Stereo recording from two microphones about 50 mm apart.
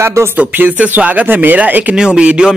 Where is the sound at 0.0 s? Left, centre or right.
Right.